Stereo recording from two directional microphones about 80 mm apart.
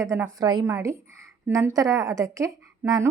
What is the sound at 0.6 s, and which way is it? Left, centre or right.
A woman's voice, right.